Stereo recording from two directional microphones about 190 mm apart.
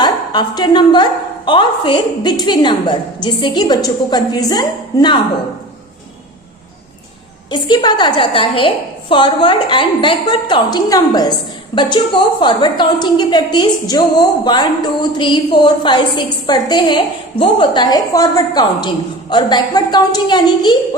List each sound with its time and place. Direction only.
0.0 s a woman's voice: 25° left (ahead or behind)
7.5 s a woman's voice: 25° left (ahead or behind)